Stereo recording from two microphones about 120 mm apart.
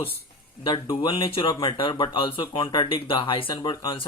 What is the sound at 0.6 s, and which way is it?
Speech, 40° left (ahead or behind).